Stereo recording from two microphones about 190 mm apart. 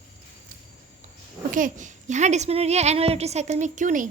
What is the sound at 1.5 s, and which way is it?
A woman's voice, 45° right (ahead or behind).